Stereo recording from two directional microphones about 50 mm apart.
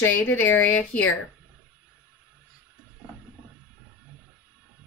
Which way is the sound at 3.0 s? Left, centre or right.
Right.